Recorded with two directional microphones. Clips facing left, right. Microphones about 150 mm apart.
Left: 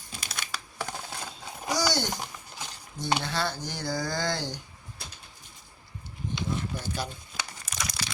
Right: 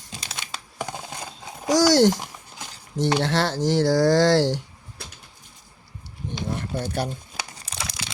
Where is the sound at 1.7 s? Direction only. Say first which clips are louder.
Right 12 dB; 90° right.